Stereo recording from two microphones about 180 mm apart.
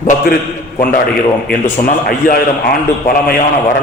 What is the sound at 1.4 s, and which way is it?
A man's voice, 55° left (ahead or behind).